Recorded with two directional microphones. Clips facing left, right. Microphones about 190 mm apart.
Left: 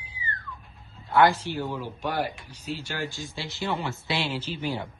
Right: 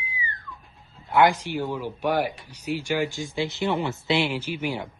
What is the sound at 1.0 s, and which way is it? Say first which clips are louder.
Speech: right 1 dB; 15° right (ahead or behind).